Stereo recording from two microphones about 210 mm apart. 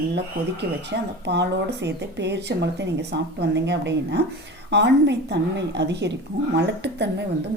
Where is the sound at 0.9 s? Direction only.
55° right (ahead or behind).